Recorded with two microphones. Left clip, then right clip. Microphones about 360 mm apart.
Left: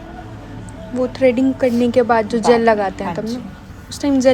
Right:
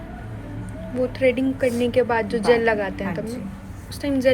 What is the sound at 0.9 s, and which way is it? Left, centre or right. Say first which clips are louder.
A woman's voice: left 5 dB; centre.